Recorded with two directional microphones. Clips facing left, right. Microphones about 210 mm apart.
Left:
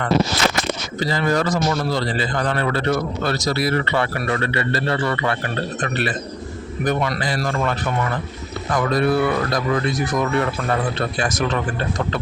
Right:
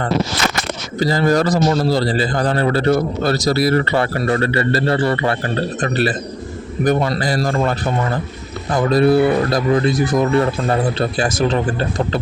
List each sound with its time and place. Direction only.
0.9 s speech: 35° right (ahead or behind)